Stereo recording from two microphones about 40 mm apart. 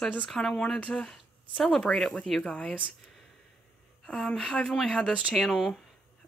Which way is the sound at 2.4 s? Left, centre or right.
Left.